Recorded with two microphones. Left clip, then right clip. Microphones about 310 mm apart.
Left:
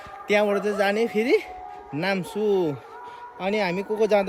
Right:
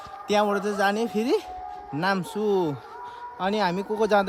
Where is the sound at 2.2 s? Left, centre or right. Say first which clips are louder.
Left 2 dB; right.